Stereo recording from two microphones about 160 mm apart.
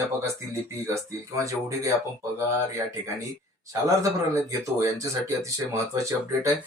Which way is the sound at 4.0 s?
20° right (ahead or behind).